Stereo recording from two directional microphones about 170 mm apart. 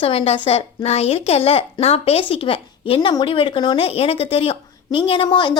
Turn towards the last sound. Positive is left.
turn(degrees=30)  # may be behind; listen again after turning